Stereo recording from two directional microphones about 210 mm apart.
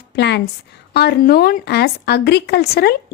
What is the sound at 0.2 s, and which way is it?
A woman's voice, 55° left (ahead or behind).